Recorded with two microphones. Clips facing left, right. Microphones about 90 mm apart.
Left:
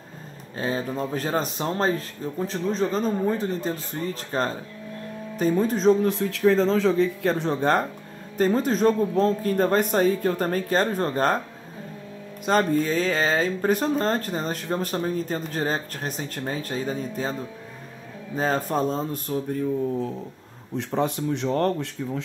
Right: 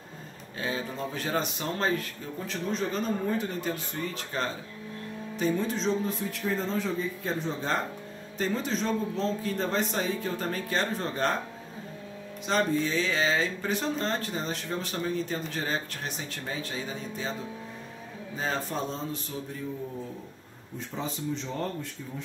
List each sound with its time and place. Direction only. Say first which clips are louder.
0.6 s speech: left 6 dB; 40° left (ahead or behind)
6.0 s speech: left 10 dB; 90° left; by 7.8 s 65° left (ahead or behind)
8.4 s speech: left 9 dB; 45° left (ahead or behind)
12.4 s speech: left 5 dB; 45° left (ahead or behind)
20.7 s speech: left 10 dB; 65° left (ahead or behind)